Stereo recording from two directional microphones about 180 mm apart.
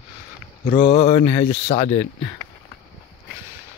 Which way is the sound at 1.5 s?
50° left (ahead or behind).